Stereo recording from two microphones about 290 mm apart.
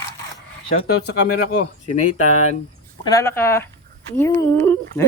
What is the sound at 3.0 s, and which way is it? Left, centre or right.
Speech, centre.